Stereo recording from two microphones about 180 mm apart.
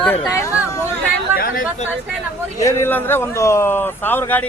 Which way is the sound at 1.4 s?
50° left (ahead or behind).